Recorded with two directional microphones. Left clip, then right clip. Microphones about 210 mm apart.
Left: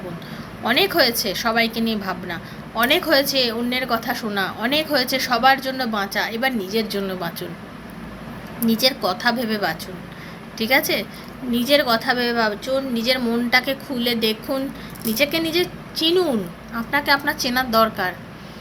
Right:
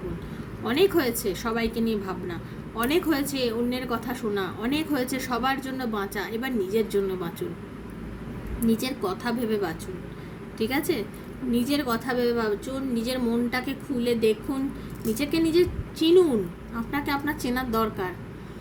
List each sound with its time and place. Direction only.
0.6 s a woman's voice: 10° right (ahead or behind)
8.8 s a woman's voice: 10° right (ahead or behind)